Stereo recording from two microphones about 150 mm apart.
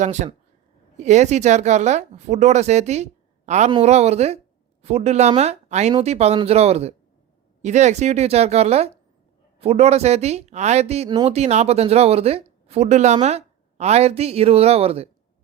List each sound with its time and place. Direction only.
0.0 s speech: 50° right (ahead or behind)